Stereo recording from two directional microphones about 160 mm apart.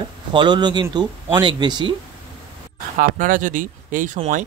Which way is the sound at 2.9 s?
60° right (ahead or behind).